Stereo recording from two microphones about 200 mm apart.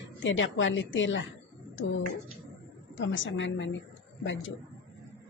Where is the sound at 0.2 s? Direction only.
70° left (ahead or behind).